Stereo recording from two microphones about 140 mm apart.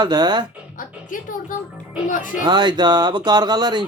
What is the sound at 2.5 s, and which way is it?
Speech, 30° right (ahead or behind).